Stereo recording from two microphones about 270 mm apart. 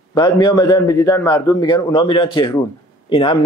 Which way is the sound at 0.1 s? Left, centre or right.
Centre.